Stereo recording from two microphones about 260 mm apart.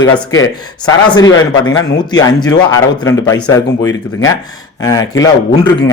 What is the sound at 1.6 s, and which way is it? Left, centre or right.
Speech, centre.